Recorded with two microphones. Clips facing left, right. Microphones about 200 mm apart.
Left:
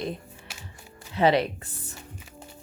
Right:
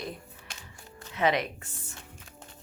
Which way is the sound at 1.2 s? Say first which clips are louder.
Left 5 dB; 30° left (ahead or behind).